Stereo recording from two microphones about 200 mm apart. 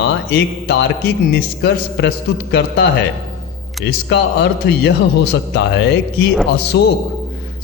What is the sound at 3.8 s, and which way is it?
A man's voice, 60° left (ahead or behind).